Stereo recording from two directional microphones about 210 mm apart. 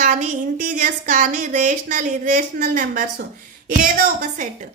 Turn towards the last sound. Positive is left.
turn(degrees=-40)  # may be behind; listen again after turning